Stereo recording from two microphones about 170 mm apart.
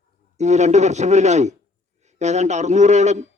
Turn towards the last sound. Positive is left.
turn(degrees=-45)  # may be behind; listen again after turning